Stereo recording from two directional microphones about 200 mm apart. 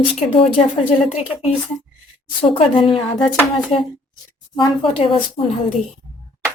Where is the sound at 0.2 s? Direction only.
30° left (ahead or behind).